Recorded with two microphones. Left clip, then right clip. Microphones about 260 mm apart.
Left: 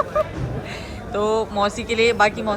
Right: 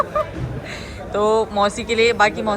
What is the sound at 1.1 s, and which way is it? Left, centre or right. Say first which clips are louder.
A woman's voice: right 3 dB; centre.